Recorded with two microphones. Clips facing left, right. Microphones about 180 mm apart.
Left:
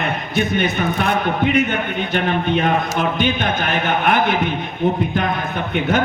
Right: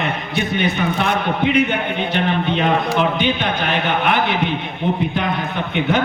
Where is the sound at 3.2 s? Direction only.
45° left (ahead or behind).